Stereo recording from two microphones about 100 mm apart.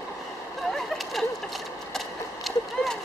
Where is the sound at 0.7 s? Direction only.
Centre (ahead or behind).